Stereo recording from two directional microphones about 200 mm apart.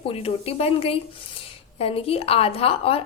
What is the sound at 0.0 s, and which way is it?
A woman's voice, 30° left (ahead or behind).